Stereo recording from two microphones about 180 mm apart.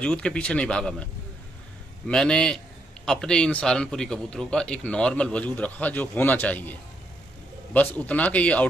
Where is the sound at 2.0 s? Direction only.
5° left (ahead or behind).